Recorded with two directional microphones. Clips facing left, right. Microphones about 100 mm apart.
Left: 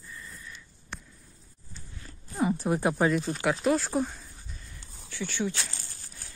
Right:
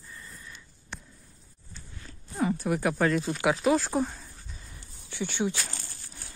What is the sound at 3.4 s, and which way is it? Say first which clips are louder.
Speech: right 3 dB; centre (ahead or behind).